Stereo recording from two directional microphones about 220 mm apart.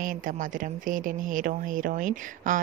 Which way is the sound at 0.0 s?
40° right (ahead or behind).